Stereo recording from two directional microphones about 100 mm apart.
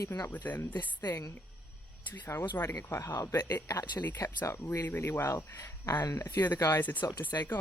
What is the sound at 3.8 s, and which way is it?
Speech, 45° left (ahead or behind).